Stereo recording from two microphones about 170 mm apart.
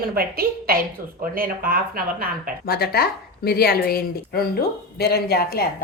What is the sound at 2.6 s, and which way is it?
A woman's voice, 60° left (ahead or behind).